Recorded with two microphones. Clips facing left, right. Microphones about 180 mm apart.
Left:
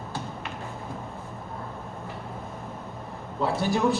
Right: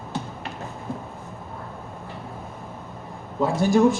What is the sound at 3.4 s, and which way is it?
Speech, 45° right (ahead or behind).